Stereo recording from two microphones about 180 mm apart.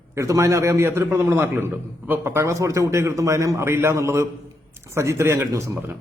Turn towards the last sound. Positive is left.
turn(degrees=-15)  # may be behind; listen again after turning